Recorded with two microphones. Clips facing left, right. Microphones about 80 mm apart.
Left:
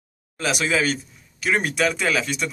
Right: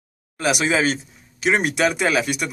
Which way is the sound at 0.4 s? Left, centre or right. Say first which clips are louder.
Right 3 dB; centre.